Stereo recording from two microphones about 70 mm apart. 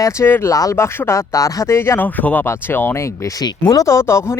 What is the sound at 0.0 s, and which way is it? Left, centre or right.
Speech, left.